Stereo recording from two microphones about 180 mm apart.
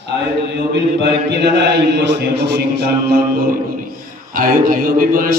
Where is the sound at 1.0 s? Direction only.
65° right (ahead or behind).